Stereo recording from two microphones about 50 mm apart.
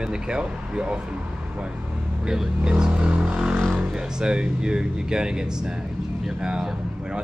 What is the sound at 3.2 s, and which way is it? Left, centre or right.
Vehicle, centre.